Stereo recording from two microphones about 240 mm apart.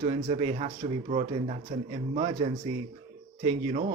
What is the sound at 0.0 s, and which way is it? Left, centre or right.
Speech, right.